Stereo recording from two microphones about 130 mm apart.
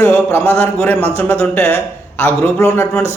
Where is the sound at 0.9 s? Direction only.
50° right (ahead or behind).